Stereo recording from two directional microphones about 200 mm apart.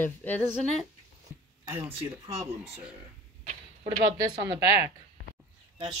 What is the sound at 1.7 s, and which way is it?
Speech, 10° right (ahead or behind).